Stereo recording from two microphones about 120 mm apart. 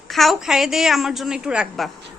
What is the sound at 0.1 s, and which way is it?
A woman's voice, centre (ahead or behind).